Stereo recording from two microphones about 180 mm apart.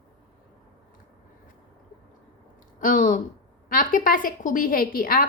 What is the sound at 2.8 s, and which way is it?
A woman's voice, 45° left (ahead or behind).